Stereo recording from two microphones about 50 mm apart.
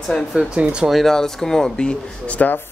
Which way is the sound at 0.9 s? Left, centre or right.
Centre.